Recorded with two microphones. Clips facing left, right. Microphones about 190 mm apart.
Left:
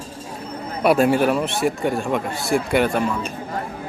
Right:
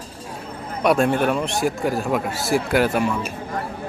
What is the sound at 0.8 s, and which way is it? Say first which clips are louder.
A man's voice: left 2 dB; 5° left (ahead or behind).